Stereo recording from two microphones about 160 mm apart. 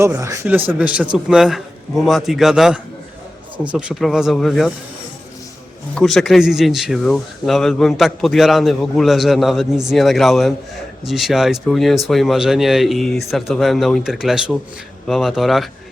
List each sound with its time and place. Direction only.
0.0 s a man's voice: 20° right (ahead or behind); by 4.7 s centre (ahead or behind)
5.9 s speech: centre (ahead or behind)